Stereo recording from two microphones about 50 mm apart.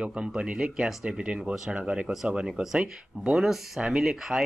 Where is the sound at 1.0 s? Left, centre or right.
Centre.